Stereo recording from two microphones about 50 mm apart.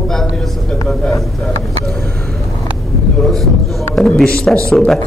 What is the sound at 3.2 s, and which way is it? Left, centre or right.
Speech, centre.